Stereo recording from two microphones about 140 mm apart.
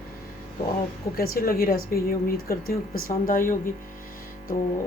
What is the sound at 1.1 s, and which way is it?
Speech, 90° left.